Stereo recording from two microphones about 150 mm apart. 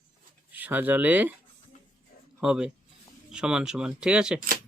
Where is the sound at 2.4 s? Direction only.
5° right (ahead or behind).